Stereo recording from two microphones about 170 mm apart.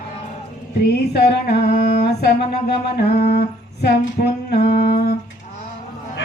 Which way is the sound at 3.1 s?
65° left (ahead or behind).